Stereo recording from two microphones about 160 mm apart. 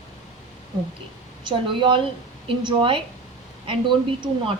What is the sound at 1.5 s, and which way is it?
Speech, 30° right (ahead or behind).